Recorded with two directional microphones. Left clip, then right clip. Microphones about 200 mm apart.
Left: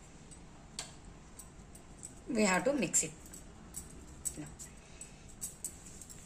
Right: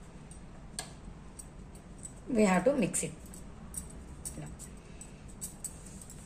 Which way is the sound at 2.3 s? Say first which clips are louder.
Right 4 dB; 10° left (ahead or behind).